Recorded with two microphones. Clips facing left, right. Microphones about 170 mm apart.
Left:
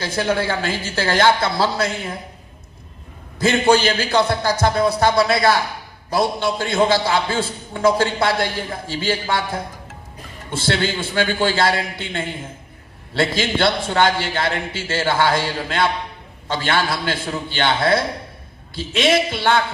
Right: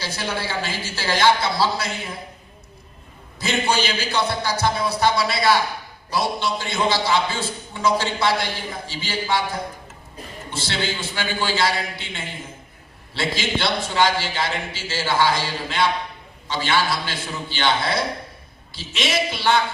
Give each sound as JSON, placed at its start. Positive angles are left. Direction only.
{"t": 0.0, "sound": "a man's voice", "side_deg": 50}
{"t": 3.4, "sound": "a man's voice", "side_deg": 50}